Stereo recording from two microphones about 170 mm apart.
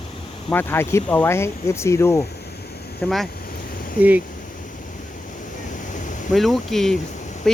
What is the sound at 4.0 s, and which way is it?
Speech, 10° right (ahead or behind).